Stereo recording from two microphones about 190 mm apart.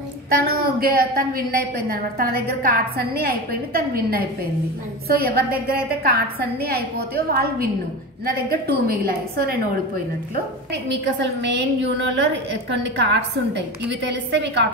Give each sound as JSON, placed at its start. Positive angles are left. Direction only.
{"t": 0.3, "sound": "a woman's voice", "side_deg": -50}
{"t": 10.9, "sound": "a woman's voice", "side_deg": -65}
{"t": 12.7, "sound": "a woman's voice", "side_deg": -65}